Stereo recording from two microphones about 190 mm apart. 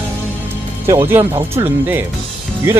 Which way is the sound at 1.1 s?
10° right (ahead or behind).